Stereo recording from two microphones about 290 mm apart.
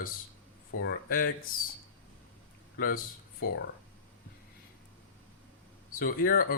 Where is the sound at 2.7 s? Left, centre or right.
Left.